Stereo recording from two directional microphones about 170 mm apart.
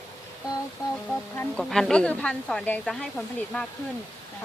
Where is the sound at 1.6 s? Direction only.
Centre (ahead or behind).